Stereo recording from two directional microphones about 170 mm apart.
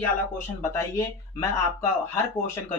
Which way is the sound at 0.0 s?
15° left (ahead or behind).